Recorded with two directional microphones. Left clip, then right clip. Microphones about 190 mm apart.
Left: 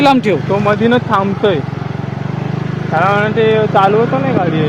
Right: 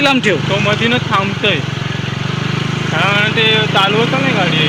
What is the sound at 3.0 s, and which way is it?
Speech, 45° left (ahead or behind).